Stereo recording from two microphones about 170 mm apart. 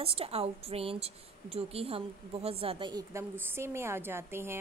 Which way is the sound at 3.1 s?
15° right (ahead or behind).